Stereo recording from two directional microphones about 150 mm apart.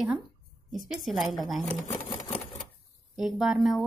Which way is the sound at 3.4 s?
Centre (ahead or behind).